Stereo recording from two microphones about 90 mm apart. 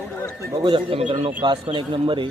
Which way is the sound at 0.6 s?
80° right.